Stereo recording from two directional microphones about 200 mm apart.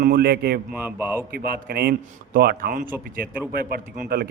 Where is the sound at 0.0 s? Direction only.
50° right (ahead or behind).